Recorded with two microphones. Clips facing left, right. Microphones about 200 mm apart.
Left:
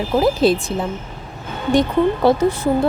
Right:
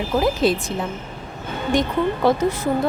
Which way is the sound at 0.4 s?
30° left (ahead or behind).